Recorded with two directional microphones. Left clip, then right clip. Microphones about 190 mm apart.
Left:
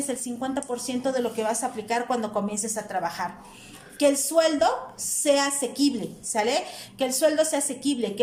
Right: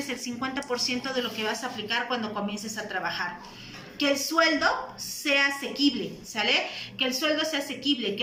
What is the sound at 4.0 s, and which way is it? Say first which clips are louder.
A woman's voice: left 3 dB; 50° left (ahead or behind).